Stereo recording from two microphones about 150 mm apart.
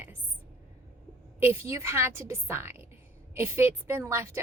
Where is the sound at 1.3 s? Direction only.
15° right (ahead or behind).